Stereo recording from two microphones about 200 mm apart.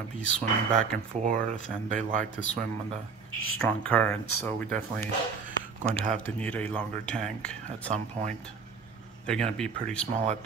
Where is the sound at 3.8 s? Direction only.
10° left (ahead or behind).